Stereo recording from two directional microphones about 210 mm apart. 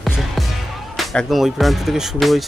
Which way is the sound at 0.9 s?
Centre (ahead or behind).